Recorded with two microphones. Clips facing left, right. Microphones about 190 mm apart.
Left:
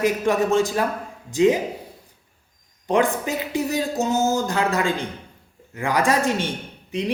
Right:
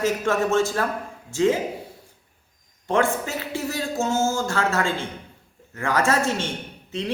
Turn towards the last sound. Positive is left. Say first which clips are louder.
# left 3 dB
turn(degrees=15)  # may be behind; listen again after turning